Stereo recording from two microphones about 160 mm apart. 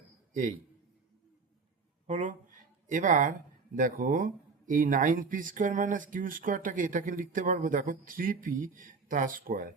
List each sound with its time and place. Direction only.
2.0 s speech: 50° right (ahead or behind)